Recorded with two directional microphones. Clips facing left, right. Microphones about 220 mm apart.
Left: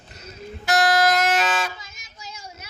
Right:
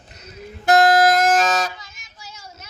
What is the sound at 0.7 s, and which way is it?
Music, 50° right (ahead or behind).